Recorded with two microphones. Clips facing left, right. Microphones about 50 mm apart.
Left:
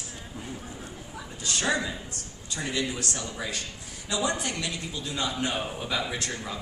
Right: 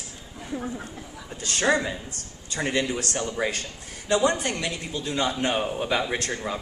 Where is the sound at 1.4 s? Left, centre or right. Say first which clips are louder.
Right 5 dB; right.